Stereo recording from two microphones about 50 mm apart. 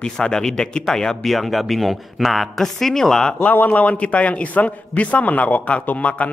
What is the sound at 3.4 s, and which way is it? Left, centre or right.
A man's voice, left.